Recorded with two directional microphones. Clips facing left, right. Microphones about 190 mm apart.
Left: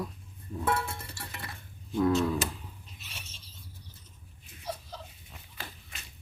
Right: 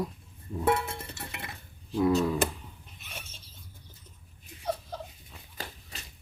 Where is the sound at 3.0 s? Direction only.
55° right (ahead or behind).